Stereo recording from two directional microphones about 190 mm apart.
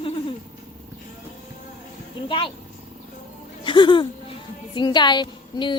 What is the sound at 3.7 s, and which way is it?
A woman's voice, 25° left (ahead or behind).